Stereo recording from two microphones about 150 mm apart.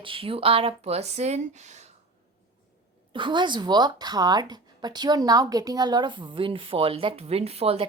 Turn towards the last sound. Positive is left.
turn(degrees=-40)  # may be behind; listen again after turning